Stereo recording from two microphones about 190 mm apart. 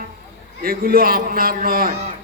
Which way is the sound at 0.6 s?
50° right (ahead or behind).